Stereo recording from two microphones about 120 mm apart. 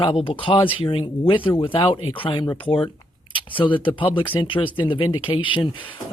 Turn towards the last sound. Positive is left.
turn(degrees=45)  # may be behind; listen again after turning